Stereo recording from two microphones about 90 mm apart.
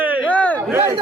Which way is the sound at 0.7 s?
25° right (ahead or behind).